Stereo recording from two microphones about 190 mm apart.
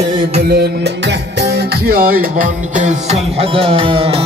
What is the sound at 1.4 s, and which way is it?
Music, 50° right (ahead or behind).